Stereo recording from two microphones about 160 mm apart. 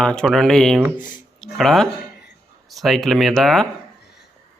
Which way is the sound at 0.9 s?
55° left (ahead or behind).